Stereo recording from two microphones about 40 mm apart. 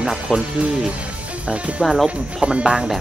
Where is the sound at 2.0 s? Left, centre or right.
Right.